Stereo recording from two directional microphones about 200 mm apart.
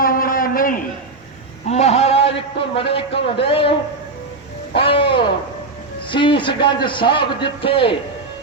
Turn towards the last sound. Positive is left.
turn(degrees=25)  # may be behind; listen again after turning